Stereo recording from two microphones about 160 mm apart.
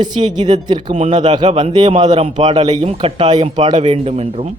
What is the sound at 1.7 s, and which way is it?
Speech, 25° right (ahead or behind).